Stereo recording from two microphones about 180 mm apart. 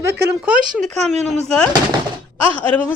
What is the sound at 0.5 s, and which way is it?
Speech, 45° right (ahead or behind).